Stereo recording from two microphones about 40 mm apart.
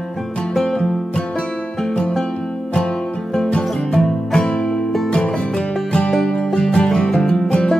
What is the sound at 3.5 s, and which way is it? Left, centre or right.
Music, centre.